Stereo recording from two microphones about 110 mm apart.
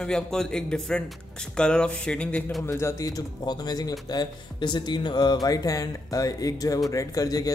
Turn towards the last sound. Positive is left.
turn(degrees=35)  # may be behind; listen again after turning